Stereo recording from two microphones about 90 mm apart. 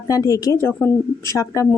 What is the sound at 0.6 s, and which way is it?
Speech, 25° left (ahead or behind).